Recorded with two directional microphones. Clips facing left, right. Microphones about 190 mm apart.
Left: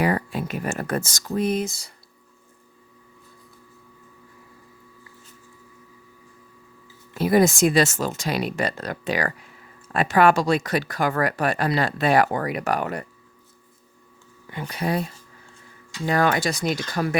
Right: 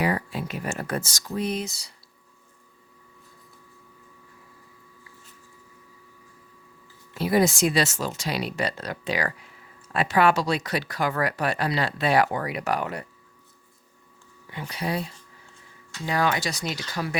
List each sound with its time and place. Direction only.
0.0 s speech: 50° left (ahead or behind)
7.1 s speech: 50° left (ahead or behind)
14.5 s speech: 50° left (ahead or behind)